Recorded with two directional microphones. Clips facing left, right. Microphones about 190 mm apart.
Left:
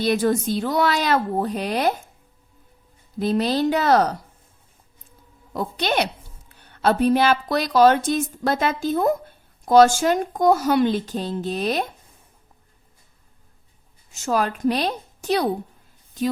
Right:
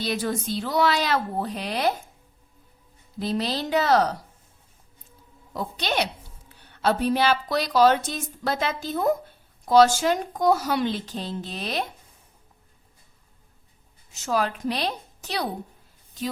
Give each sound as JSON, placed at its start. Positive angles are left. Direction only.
{"t": 0.0, "sound": "a woman's voice", "side_deg": 50}
{"t": 3.2, "sound": "a woman's voice", "side_deg": 50}
{"t": 5.5, "sound": "a woman's voice", "side_deg": 55}
{"t": 14.1, "sound": "a woman's voice", "side_deg": 50}